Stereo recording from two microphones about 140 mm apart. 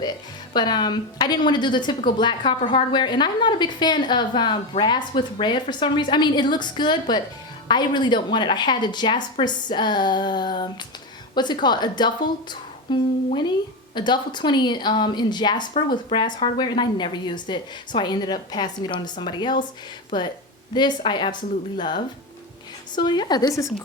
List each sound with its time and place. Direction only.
0.5 s a woman's voice: 30° left (ahead or behind)